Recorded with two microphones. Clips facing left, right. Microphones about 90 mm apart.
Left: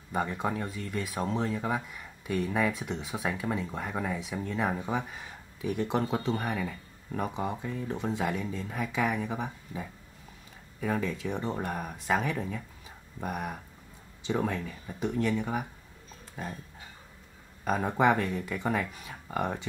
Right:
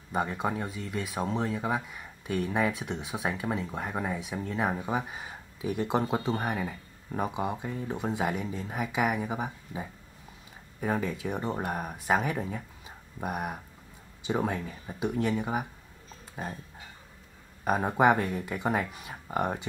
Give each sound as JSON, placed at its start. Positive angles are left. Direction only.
{"t": 0.1, "sound": "speech", "side_deg": -5}
{"t": 5.9, "sound": "speech", "side_deg": -15}
{"t": 16.4, "sound": "dog", "side_deg": -20}
{"t": 17.6, "sound": "speech", "side_deg": -15}